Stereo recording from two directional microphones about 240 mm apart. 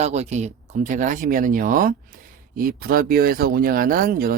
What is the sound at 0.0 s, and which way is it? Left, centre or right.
Speech, right.